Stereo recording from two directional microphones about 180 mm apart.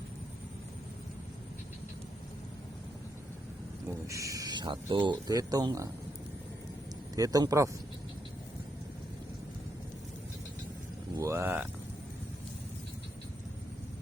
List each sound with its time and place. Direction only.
3.8 s speech: 15° right (ahead or behind)
7.2 s speech: 20° right (ahead or behind)
11.2 s speech: 15° right (ahead or behind)